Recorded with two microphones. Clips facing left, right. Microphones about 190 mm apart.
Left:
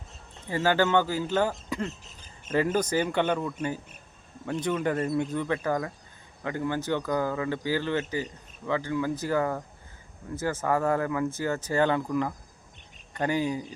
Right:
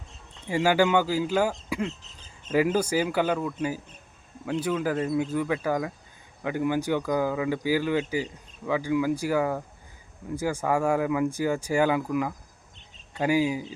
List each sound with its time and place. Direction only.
0.4 s speech: 10° right (ahead or behind)
1.9 s a sound: 10° left (ahead or behind)
2.7 s speech: 10° right (ahead or behind)